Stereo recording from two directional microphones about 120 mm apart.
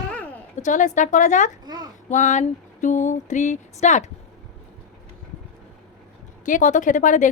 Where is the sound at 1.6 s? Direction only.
35° right (ahead or behind).